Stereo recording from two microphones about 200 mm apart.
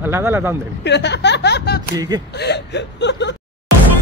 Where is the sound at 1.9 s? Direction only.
20° right (ahead or behind).